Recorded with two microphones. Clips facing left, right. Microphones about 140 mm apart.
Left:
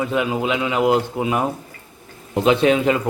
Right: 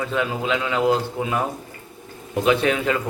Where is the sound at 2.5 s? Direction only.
20° left (ahead or behind).